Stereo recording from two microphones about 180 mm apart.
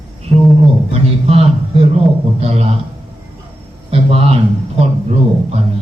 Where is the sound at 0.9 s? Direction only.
35° right (ahead or behind).